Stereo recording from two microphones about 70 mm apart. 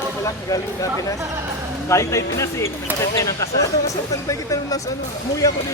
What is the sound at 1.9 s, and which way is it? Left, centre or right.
Speech, left.